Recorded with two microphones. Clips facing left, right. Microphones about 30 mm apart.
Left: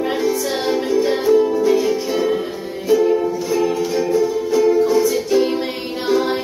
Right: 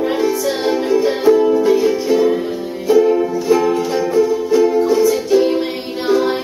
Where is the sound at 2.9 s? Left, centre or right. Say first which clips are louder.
Right 3 dB; centre.